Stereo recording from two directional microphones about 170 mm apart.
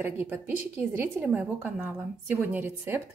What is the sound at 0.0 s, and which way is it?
A woman's voice, 15° right (ahead or behind).